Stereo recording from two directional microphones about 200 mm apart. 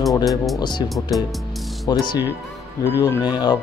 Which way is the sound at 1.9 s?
20° left (ahead or behind).